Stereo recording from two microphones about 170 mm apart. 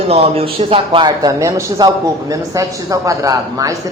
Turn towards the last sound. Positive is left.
turn(degrees=-20)  # may be behind; listen again after turning